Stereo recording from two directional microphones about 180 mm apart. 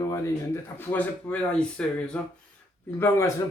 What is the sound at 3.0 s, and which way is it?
Speech, 15° left (ahead or behind).